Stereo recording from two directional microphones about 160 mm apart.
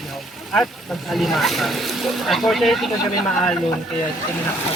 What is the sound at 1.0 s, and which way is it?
Speech, centre (ahead or behind).